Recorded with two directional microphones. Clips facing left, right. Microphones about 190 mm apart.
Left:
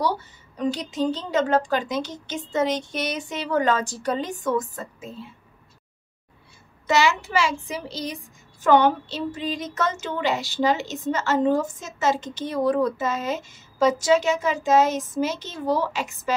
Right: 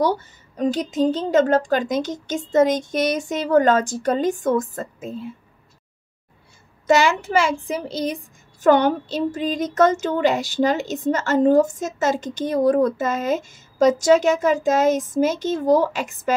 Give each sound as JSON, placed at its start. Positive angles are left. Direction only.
{"t": 0.0, "sound": "speech", "side_deg": -45}
{"t": 6.9, "sound": "speech", "side_deg": -50}